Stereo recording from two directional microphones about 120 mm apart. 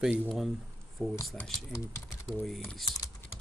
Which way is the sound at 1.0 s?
5° left (ahead or behind).